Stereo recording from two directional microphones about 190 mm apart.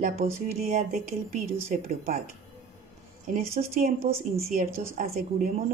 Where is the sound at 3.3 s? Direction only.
45° right (ahead or behind).